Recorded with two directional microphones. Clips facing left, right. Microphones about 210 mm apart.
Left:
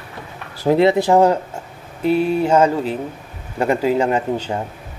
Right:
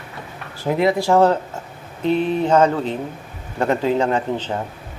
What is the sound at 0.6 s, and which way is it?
Speech, 30° left (ahead or behind).